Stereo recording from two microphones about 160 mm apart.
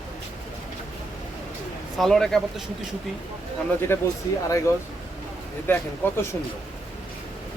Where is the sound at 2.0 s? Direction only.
Centre (ahead or behind).